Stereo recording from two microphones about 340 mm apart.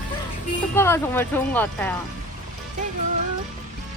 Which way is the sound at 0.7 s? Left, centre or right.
Centre.